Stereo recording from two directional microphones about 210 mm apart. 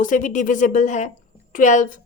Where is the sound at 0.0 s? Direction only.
40° left (ahead or behind).